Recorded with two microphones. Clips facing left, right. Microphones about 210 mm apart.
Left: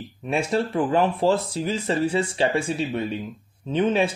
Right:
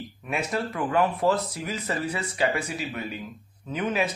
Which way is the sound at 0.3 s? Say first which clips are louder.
Left 6 dB; 30° left (ahead or behind).